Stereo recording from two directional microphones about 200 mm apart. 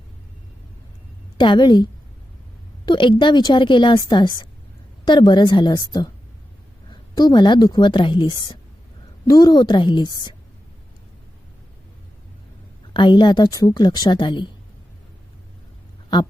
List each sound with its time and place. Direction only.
1.4 s a woman's voice: 25° left (ahead or behind)
12.9 s a woman's voice: 25° left (ahead or behind)